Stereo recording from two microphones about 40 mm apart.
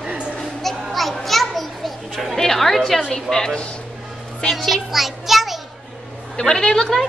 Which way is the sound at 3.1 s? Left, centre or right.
Centre.